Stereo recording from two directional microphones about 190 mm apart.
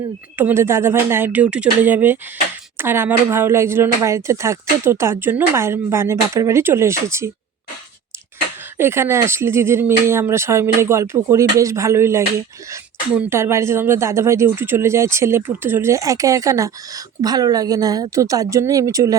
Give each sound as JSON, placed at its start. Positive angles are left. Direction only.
{"t": 0.3, "sound": "speech", "side_deg": -10}
{"t": 8.8, "sound": "speech", "side_deg": -10}